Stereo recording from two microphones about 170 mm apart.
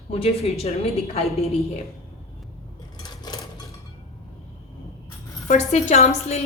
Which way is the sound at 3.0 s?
25° left (ahead or behind).